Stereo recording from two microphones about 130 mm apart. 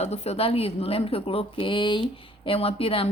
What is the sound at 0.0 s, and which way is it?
Speech, 55° left (ahead or behind).